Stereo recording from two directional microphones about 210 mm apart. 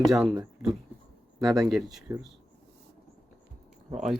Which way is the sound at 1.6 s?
Centre (ahead or behind).